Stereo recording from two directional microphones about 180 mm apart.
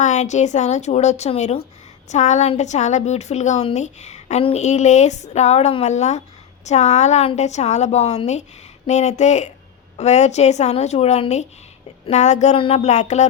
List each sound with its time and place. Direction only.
0.0 s a woman's voice: 40° left (ahead or behind)